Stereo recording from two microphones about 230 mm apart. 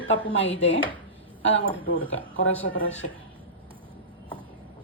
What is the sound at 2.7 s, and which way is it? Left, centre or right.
Speech, left.